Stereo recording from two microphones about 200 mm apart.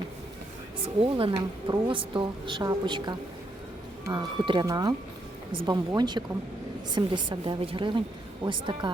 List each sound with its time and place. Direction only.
1.0 s a woman's voice: 25° right (ahead or behind)